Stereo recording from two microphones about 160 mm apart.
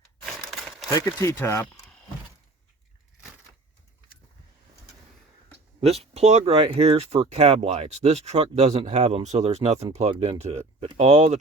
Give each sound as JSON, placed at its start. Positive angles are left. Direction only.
{"t": 0.3, "sound": "crumpling", "side_deg": 0}
{"t": 0.9, "sound": "speech", "side_deg": 20}
{"t": 5.8, "sound": "speech", "side_deg": -40}